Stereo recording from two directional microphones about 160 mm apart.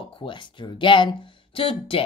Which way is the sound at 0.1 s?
30° left (ahead or behind).